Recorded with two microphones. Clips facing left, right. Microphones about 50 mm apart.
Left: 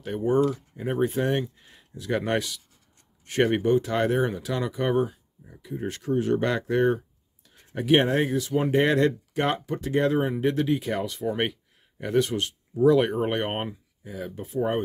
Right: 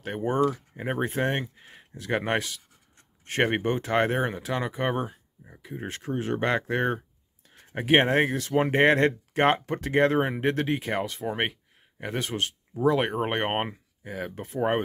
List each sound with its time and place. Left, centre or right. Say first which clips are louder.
0.0 s speech: left 2 dB; right